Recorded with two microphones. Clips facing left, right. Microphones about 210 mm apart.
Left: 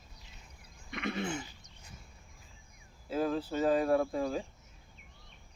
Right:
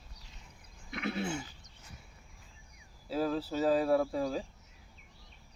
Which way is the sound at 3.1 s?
5° right (ahead or behind).